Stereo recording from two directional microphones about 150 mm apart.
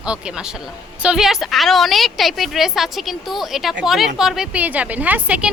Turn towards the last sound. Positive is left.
turn(degrees=-10)  # may be behind; listen again after turning